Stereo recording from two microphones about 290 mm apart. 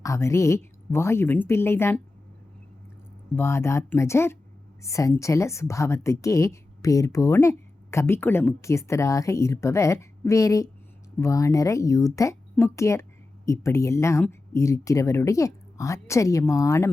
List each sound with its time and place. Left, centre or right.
0.0 s a woman's voice: centre
3.3 s a woman's voice: centre